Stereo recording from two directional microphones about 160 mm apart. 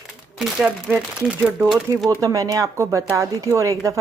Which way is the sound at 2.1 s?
20° right (ahead or behind).